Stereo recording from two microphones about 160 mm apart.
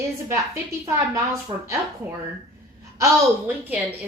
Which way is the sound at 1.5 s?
35° right (ahead or behind).